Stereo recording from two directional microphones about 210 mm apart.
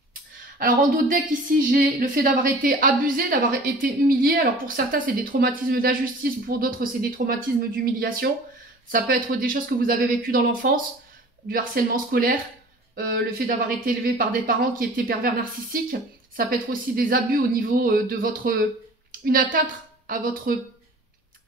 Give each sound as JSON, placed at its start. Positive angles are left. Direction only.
{"t": 0.6, "sound": "a woman's voice", "side_deg": -40}